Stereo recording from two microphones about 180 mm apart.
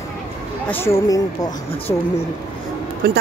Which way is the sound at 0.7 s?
15° left (ahead or behind).